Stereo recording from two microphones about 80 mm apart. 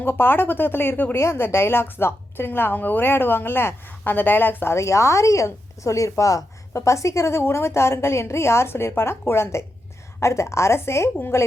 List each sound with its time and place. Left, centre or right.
0.0 s a woman's voice: left